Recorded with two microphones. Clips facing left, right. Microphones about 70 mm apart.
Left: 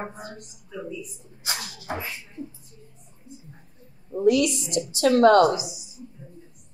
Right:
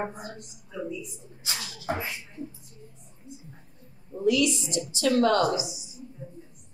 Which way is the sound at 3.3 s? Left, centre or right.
Right.